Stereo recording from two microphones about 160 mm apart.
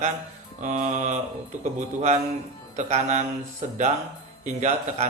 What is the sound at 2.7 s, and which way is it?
Speech, 45° right (ahead or behind).